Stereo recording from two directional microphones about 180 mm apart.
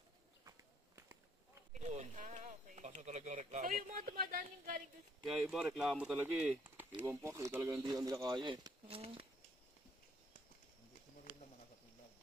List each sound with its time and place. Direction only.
0.4 s walk: 15° right (ahead or behind)
1.7 s speech: 40° right (ahead or behind)
5.2 s speech: centre (ahead or behind); by 9.0 s 25° right (ahead or behind)